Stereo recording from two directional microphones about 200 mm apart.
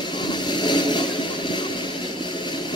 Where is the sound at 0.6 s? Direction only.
20° left (ahead or behind).